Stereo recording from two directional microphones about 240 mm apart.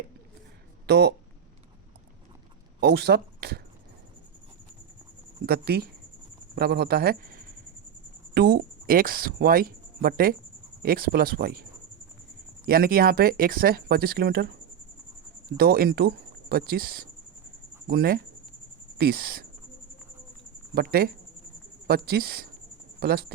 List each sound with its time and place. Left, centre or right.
0.9 s speech: right
2.8 s speech: right
5.5 s speech: right
12.6 s speech: right
15.5 s speech: right
20.7 s speech: right